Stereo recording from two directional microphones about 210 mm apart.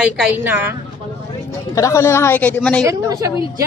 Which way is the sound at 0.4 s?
10° right (ahead or behind).